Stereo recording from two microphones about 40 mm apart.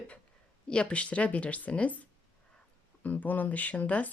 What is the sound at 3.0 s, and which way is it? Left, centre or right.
Speech, left.